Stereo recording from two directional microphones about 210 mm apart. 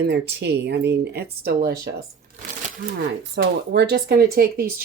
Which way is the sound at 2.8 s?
40° right (ahead or behind).